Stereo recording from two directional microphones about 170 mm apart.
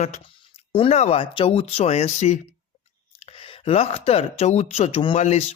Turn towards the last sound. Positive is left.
turn(degrees=40)  # may be behind; listen again after turning